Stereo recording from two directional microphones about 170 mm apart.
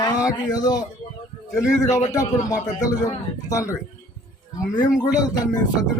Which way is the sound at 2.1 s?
20° left (ahead or behind).